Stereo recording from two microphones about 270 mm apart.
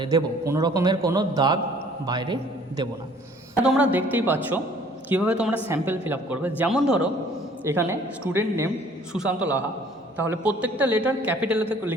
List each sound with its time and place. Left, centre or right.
0.0 s a man's voice: centre
3.5 s a man's voice: centre